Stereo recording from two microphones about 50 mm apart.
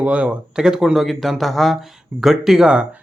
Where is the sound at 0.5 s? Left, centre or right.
Centre.